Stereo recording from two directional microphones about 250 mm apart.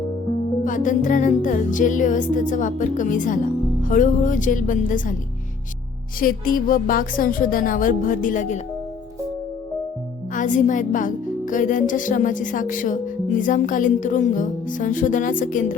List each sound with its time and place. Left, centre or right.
0.6 s music: left
6.1 s music: left
10.3 s music: left